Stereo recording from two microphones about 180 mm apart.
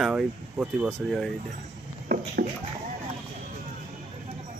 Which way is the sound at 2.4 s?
55° right (ahead or behind).